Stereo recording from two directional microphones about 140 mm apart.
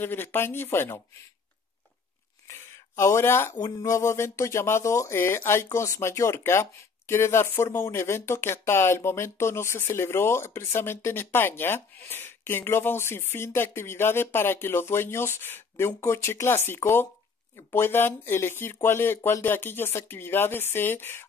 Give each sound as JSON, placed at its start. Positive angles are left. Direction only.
{"t": 0.0, "sound": "speech", "side_deg": 15}
{"t": 2.4, "sound": "a sound", "side_deg": 20}
{"t": 3.5, "sound": "speech", "side_deg": 25}